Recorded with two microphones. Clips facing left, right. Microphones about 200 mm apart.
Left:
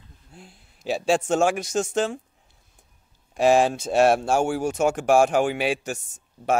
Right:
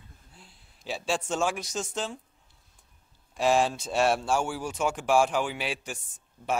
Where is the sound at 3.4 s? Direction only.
50° left (ahead or behind).